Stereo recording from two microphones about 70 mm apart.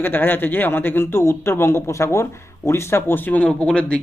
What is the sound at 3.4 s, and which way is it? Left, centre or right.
Speech, centre.